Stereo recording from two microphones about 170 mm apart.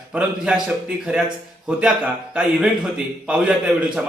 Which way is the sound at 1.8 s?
5° right (ahead or behind).